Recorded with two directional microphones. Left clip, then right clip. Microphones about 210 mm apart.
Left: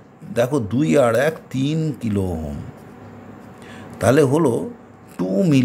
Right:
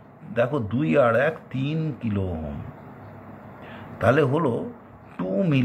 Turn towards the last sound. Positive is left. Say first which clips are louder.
# left 6 dB
turn(degrees=40)  # may be behind; listen again after turning